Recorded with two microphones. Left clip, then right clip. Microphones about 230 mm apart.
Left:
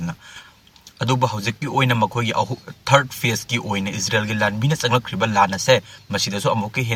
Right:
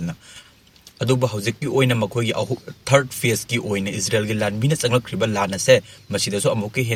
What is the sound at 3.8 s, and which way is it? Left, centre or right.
Speech, centre.